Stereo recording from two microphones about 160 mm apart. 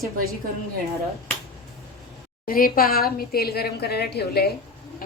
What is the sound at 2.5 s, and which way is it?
A woman's voice, 65° left (ahead or behind).